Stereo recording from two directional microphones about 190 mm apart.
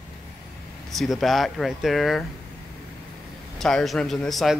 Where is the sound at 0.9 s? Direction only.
Centre (ahead or behind).